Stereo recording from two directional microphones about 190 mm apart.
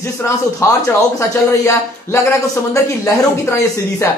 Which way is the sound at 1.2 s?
15° left (ahead or behind).